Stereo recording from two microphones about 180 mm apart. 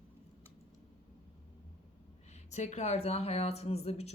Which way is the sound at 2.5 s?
40° left (ahead or behind).